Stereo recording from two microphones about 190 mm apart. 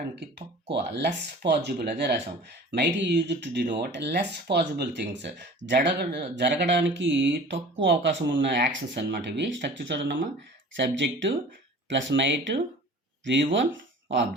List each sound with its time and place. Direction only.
0.2 s speech: 65° right (ahead or behind)